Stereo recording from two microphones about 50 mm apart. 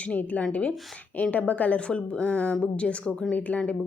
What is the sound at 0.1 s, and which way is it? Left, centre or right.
A woman's voice, left.